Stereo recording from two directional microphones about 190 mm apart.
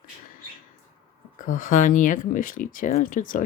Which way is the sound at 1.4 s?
45° left (ahead or behind).